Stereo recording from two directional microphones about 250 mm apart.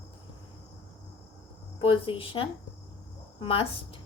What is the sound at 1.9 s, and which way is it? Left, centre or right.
A woman's voice, left.